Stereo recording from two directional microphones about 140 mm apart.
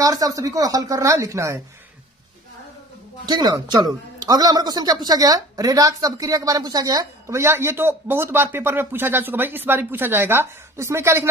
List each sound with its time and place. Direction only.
0.0 s speech: 25° right (ahead or behind)
3.3 s speech: 30° right (ahead or behind)